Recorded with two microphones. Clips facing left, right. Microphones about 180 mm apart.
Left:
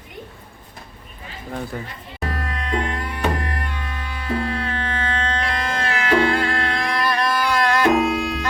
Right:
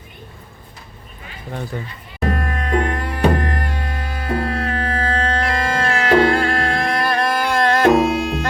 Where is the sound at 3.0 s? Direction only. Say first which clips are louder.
Right 6 dB; 35° right (ahead or behind).